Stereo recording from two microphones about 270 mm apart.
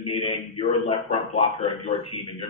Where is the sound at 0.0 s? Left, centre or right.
Centre.